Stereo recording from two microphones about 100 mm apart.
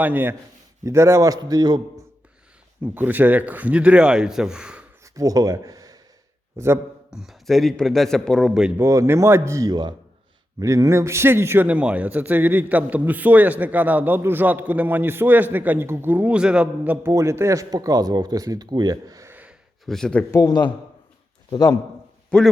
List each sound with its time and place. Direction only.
0.0 s speech: 20° right (ahead or behind); by 1.8 s 40° right (ahead or behind)
2.8 s a man's voice: 15° right (ahead or behind)
5.1 s speech: 35° right (ahead or behind)
7.1 s a man's voice: 5° right (ahead or behind)
8.8 s a man's voice: 30° right (ahead or behind)
17.1 s speech: 30° right (ahead or behind)
19.3 s gasp: 15° right (ahead or behind)
19.8 s speech: 5° left (ahead or behind)
20.3 s a man's voice: 45° left (ahead or behind)
22.3 s a man's voice: 10° left (ahead or behind)